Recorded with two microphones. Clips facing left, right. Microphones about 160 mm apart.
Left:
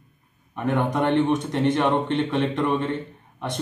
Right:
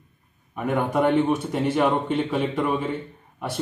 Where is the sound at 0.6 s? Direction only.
5° right (ahead or behind).